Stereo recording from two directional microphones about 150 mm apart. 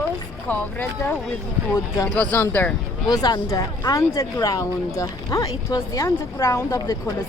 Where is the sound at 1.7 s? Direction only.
20° left (ahead or behind).